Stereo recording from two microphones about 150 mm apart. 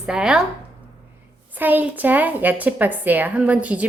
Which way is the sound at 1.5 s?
10° right (ahead or behind).